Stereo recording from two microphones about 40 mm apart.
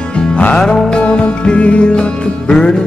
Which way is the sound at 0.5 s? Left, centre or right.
Centre.